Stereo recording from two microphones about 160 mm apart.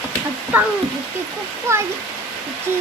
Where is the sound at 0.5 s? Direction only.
10° right (ahead or behind).